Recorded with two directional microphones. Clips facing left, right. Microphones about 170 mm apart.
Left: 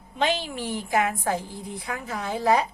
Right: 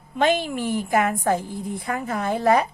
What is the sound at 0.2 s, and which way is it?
A woman's voice, 50° right (ahead or behind).